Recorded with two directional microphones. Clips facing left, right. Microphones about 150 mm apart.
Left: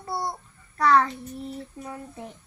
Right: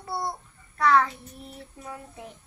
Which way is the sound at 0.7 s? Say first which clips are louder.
Left 1 dB; centre (ahead or behind).